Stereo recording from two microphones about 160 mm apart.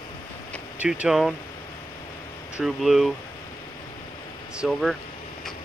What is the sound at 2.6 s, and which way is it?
Speech, centre (ahead or behind).